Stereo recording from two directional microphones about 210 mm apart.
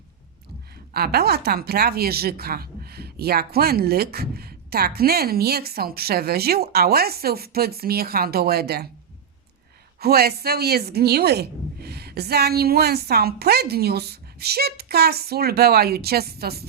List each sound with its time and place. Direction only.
0.9 s speech: 50° right (ahead or behind)
10.0 s speech: 50° right (ahead or behind)